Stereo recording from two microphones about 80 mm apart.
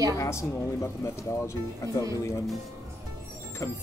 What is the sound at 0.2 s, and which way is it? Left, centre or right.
Speech, left.